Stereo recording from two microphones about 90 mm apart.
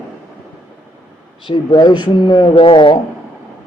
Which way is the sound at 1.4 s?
60° left (ahead or behind).